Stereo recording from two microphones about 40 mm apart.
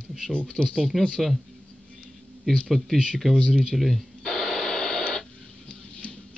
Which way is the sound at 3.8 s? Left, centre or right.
Centre.